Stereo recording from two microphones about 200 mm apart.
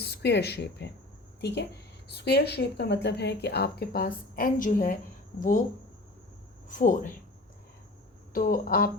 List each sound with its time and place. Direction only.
0.0 s a woman's voice: 55° left (ahead or behind)
6.7 s speech: 40° left (ahead or behind)
8.3 s speech: 45° left (ahead or behind)